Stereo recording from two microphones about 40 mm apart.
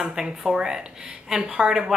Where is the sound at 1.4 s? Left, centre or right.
Right.